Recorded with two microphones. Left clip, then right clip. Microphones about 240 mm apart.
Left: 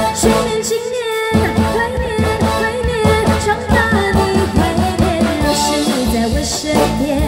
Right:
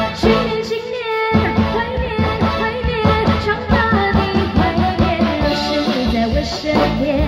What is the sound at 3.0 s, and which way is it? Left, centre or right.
Music, left.